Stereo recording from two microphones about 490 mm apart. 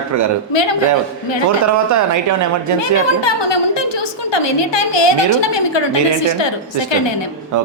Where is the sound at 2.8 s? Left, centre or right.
Left.